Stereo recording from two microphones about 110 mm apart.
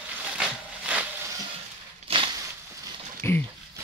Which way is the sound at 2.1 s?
50° right (ahead or behind).